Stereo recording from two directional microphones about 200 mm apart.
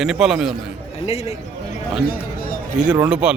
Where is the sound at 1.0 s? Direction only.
30° left (ahead or behind).